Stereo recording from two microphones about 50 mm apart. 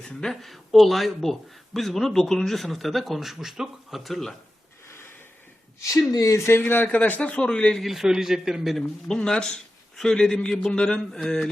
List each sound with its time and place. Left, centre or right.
0.0 s a man's voice: centre
0.4 s speech: centre
4.9 s a sound: left
5.8 s speech: left
6.8 s speech: left
7.2 s a man's voice: centre
7.8 s a man's voice: centre
9.0 s a man's voice: centre